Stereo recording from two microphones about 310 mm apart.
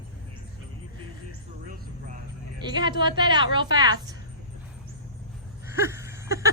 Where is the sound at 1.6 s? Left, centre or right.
Right.